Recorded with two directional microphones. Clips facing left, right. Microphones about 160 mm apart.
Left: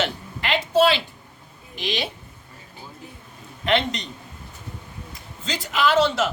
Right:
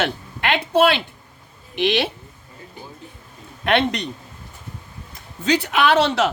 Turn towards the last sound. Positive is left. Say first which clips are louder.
# right 2 dB
turn(degrees=-70)  # may be behind; listen again after turning